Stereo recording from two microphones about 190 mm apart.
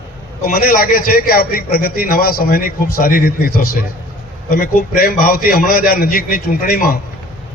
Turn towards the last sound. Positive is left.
turn(degrees=50)  # may be behind; listen again after turning